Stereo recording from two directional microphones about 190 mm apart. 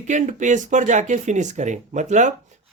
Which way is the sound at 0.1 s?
40° right (ahead or behind).